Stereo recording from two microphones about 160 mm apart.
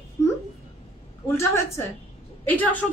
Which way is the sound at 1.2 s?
15° left (ahead or behind).